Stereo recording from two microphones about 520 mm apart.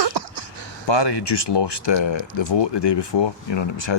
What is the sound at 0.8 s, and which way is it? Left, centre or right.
Speech, left.